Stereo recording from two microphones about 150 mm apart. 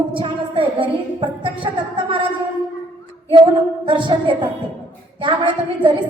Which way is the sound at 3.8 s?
30° right (ahead or behind).